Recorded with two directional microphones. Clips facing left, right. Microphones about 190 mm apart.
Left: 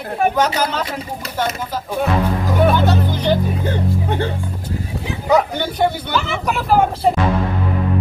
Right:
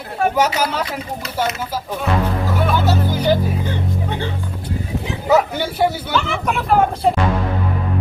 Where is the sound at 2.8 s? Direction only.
5° right (ahead or behind).